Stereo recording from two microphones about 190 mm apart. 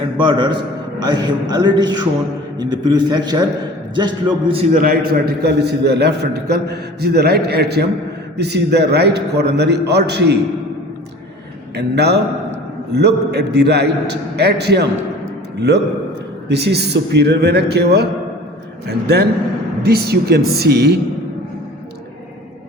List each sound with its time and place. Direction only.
0.2 s a man's voice: 25° right (ahead or behind)
4.7 s a man's voice: 50° right (ahead or behind)
11.8 s a man's voice: 60° right (ahead or behind)
16.5 s a man's voice: 60° right (ahead or behind)